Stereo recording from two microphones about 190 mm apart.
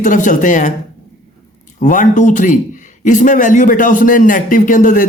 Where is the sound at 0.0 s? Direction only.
40° left (ahead or behind).